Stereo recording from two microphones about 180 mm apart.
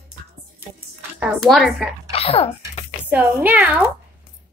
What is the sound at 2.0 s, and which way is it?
Speech, 35° left (ahead or behind).